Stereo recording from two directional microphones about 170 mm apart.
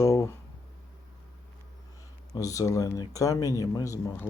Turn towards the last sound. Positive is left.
turn(degrees=20)  # may be behind; listen again after turning